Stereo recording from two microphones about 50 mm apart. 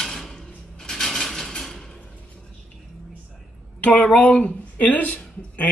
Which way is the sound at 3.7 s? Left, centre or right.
Left.